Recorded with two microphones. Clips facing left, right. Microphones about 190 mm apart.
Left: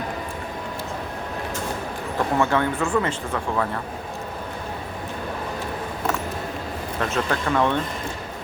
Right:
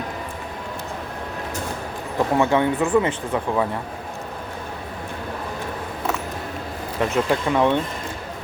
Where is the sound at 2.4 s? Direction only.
15° right (ahead or behind).